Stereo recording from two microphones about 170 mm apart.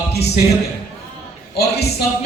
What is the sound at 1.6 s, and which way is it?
Speech, 70° left (ahead or behind).